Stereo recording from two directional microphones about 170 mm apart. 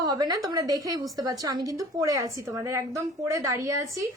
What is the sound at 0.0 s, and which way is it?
A woman's voice, 20° right (ahead or behind).